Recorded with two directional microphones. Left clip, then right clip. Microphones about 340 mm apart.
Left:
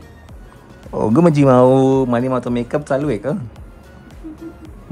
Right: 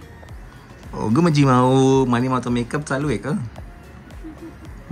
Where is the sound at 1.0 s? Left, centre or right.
Centre.